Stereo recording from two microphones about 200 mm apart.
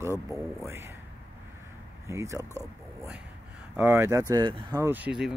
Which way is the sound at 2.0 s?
15° right (ahead or behind).